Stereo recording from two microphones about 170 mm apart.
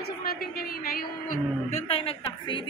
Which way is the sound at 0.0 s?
65° left (ahead or behind).